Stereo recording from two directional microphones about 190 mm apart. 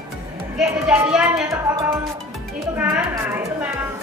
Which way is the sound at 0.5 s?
5° right (ahead or behind).